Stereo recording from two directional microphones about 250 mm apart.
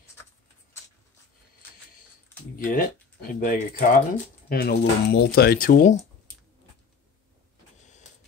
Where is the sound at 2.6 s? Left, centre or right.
Left.